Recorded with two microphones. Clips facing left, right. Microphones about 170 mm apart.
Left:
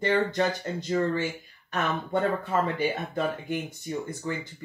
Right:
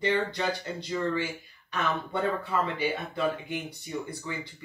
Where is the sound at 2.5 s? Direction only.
45° left (ahead or behind).